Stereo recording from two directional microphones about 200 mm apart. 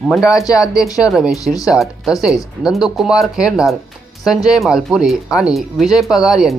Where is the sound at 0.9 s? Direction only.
Centre (ahead or behind).